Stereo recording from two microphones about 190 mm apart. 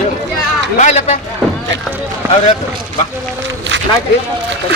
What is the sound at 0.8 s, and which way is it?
Speech, 40° left (ahead or behind).